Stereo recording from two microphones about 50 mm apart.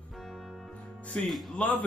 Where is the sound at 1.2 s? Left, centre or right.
Centre.